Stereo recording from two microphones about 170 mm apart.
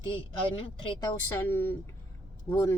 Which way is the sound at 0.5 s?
30° left (ahead or behind).